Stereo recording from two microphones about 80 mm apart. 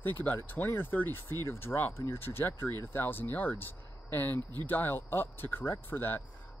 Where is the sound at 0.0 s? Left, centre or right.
Left.